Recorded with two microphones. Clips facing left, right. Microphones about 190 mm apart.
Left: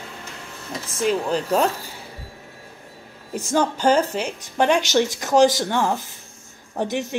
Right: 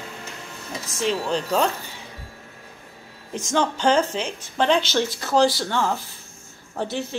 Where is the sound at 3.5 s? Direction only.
10° left (ahead or behind).